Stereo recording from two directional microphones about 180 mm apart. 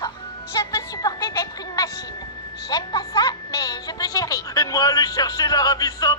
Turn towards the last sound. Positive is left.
turn(degrees=20)  # may be behind; listen again after turning